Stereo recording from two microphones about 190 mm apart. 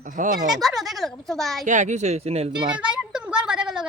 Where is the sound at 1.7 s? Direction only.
40° right (ahead or behind); by 2.8 s 25° right (ahead or behind).